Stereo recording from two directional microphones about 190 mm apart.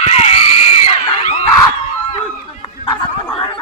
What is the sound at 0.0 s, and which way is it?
Screaming, 35° left (ahead or behind).